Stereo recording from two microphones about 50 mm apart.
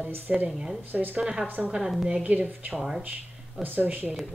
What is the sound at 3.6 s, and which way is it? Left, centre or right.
Speech, right.